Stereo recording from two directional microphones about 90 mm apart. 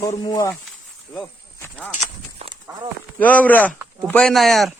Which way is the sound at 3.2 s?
20° left (ahead or behind).